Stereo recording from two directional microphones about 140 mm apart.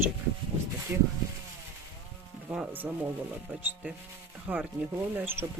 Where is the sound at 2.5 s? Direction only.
10° right (ahead or behind).